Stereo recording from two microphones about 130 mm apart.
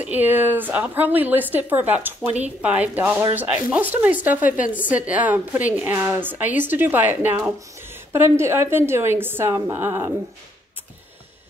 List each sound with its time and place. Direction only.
0.0 s a woman's voice: 15° right (ahead or behind)